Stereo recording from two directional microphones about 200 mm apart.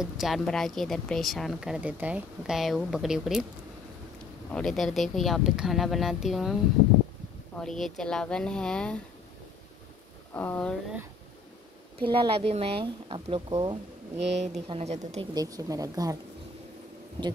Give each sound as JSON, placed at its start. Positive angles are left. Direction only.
{"t": 0.0, "sound": "speech", "side_deg": 0}
{"t": 4.5, "sound": "speech", "side_deg": 5}
{"t": 10.3, "sound": "speech", "side_deg": 10}
{"t": 12.0, "sound": "a woman's voice", "side_deg": -25}
{"t": 15.3, "sound": "speech", "side_deg": -20}